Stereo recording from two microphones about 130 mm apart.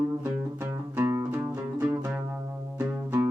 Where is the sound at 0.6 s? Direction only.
15° right (ahead or behind).